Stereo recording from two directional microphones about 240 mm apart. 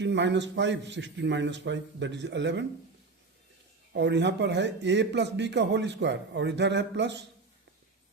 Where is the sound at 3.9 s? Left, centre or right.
Right.